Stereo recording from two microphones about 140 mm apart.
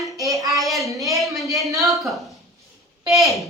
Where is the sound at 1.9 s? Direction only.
Centre (ahead or behind).